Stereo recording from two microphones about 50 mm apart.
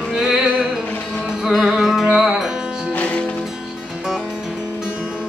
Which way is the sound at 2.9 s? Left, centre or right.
Left.